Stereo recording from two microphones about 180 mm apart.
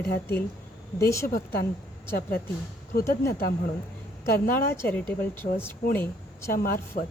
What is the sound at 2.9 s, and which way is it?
Speech, 50° left (ahead or behind).